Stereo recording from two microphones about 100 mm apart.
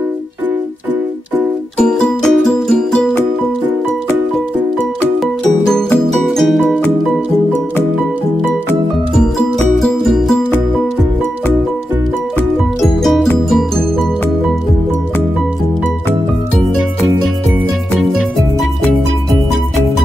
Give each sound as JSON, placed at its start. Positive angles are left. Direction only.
{"t": 1.8, "sound": "music", "side_deg": 5}
{"t": 5.2, "sound": "music", "side_deg": 5}
{"t": 9.8, "sound": "music", "side_deg": 0}
{"t": 13.0, "sound": "music", "side_deg": 5}